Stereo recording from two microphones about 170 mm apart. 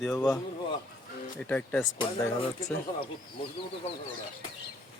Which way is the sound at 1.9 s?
25° left (ahead or behind).